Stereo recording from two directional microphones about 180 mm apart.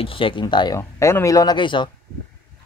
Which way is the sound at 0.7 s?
15° left (ahead or behind).